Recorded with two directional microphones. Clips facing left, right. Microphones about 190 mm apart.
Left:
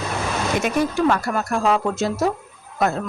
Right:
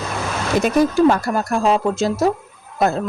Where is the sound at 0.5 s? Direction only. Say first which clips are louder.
Right 7 dB; 35° right (ahead or behind).